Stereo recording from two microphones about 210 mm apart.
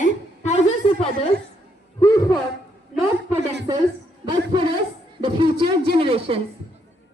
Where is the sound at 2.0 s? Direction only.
15° left (ahead or behind).